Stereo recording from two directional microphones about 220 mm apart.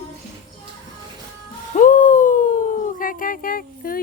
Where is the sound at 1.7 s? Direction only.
35° left (ahead or behind).